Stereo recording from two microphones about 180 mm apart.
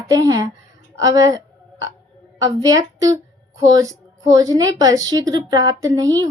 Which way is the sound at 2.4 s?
20° right (ahead or behind).